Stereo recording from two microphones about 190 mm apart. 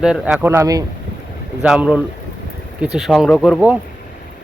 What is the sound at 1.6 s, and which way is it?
Speech, 5° right (ahead or behind).